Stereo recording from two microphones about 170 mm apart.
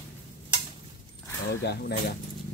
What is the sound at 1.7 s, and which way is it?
Speech, 70° left (ahead or behind).